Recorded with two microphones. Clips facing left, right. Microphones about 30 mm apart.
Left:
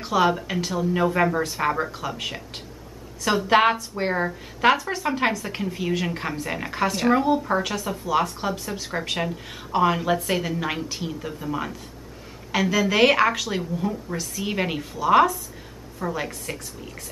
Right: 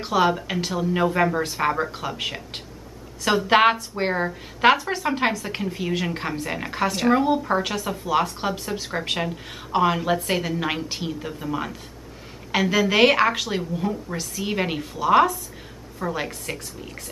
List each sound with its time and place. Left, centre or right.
0.0 s a woman's voice: centre
4.1 s a woman's voice: centre